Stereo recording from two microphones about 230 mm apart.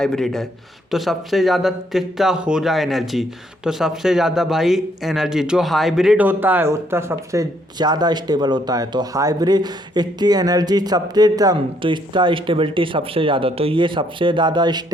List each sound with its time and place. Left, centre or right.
0.0 s a man's voice: centre